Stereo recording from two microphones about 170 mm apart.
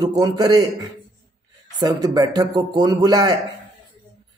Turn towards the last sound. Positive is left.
turn(degrees=-25)  # may be behind; listen again after turning